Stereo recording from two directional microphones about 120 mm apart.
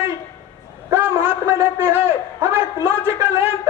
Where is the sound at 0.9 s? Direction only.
15° right (ahead or behind).